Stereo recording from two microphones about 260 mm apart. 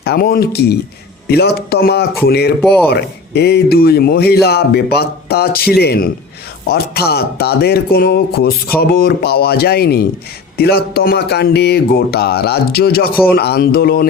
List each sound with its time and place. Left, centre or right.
0.0 s speech: left